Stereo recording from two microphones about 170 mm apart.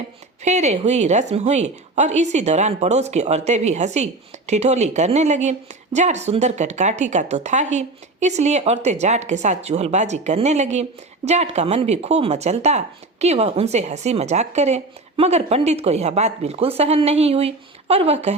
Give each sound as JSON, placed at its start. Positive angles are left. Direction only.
{"t": 0.4, "sound": "speech", "side_deg": -40}